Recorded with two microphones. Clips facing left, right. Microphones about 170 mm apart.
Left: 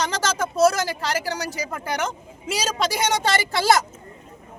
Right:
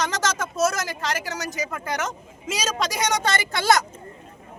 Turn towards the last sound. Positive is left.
turn(degrees=30)  # may be behind; listen again after turning